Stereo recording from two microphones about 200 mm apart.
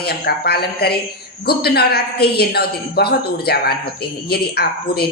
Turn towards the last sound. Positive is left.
turn(degrees=50)  # may be behind; listen again after turning